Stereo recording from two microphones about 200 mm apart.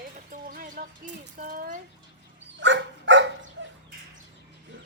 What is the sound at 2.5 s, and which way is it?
Dog, 65° right (ahead or behind).